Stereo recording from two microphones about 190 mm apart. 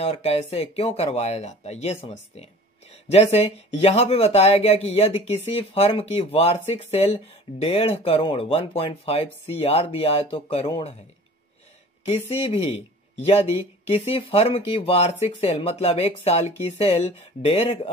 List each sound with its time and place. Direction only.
0.0 s speech: 35° left (ahead or behind)
3.1 s speech: 35° left (ahead or behind)
12.4 s speech: 30° left (ahead or behind)